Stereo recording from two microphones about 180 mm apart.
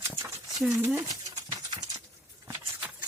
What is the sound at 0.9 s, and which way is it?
Dog, 20° right (ahead or behind).